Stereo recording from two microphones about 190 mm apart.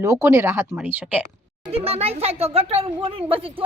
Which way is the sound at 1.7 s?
30° right (ahead or behind).